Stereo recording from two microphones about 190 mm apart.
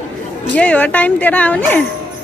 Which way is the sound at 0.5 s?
5° left (ahead or behind).